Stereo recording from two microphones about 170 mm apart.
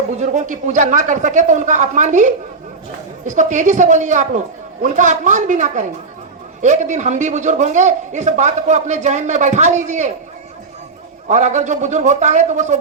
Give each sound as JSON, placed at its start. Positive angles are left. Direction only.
{"t": 0.2, "sound": "a man's voice", "side_deg": -45}
{"t": 11.3, "sound": "a man's voice", "side_deg": -45}